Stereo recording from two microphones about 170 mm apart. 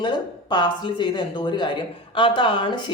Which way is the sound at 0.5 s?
25° left (ahead or behind).